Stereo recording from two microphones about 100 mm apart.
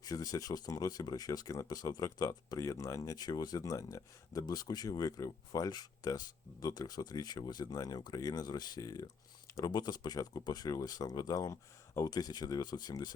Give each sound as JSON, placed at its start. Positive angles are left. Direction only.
{"t": 0.0, "sound": "speech", "side_deg": 35}